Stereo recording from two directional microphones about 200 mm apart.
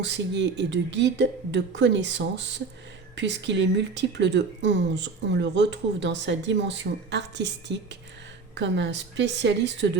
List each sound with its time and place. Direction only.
0.0 s a woman's voice: 60° right (ahead or behind)